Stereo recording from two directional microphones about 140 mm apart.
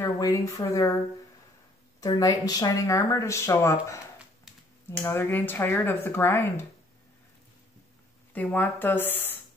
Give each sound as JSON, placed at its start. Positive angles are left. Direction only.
{"t": 0.0, "sound": "a woman's voice", "side_deg": 25}
{"t": 2.0, "sound": "speech", "side_deg": 25}
{"t": 5.0, "sound": "speech", "side_deg": 15}
{"t": 8.3, "sound": "speech", "side_deg": 10}